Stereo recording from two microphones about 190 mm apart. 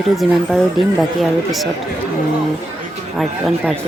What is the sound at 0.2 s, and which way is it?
Speech, centre (ahead or behind).